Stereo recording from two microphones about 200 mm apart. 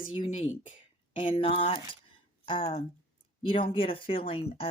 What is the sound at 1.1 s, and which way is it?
Speech, 25° left (ahead or behind).